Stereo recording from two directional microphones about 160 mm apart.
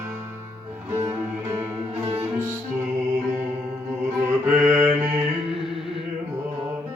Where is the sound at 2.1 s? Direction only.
15° right (ahead or behind).